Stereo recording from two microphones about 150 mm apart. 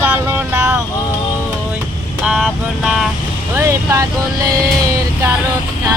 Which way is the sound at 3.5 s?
20° right (ahead or behind).